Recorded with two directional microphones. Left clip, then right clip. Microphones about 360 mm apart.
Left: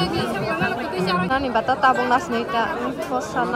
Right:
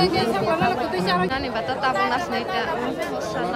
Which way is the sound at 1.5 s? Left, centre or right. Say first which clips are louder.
Left 7 dB; centre.